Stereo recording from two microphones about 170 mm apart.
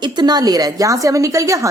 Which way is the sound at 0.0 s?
25° right (ahead or behind).